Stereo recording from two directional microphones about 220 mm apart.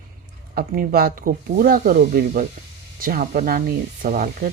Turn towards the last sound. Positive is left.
turn(degrees=-40)  # may be behind; listen again after turning